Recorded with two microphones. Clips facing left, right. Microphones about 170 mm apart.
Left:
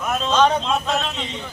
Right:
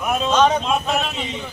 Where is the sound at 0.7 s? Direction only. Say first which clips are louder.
Right 1 dB; 15° right (ahead or behind).